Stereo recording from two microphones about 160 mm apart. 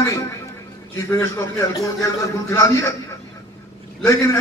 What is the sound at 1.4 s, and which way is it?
A man's voice, 20° left (ahead or behind).